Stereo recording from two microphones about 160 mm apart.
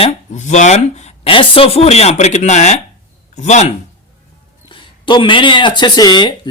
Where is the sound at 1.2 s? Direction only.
35° left (ahead or behind).